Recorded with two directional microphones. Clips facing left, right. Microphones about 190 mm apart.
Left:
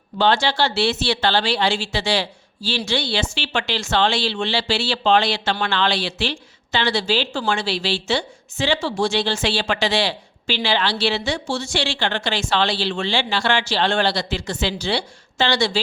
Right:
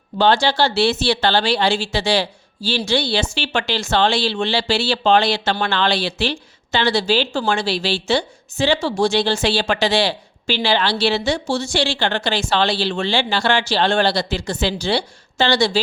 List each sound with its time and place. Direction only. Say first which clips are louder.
0.2 s speech: right 3 dB; 40° right (ahead or behind)